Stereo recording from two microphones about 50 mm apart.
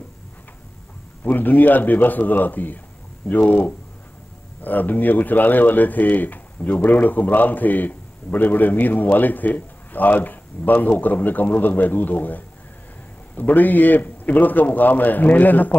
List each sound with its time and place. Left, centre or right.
1.2 s speech: left